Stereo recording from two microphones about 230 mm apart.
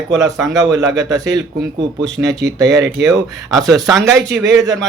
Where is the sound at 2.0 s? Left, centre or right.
Centre.